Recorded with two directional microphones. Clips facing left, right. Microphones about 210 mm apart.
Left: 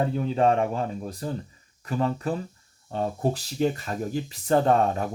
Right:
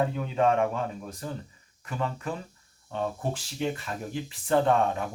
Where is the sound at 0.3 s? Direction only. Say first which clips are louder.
Left 1 dB; 35° left (ahead or behind).